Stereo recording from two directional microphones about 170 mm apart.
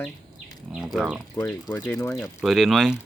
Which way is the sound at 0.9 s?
5° right (ahead or behind).